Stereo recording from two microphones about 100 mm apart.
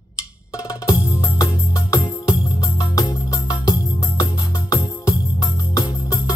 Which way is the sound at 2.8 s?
35° left (ahead or behind).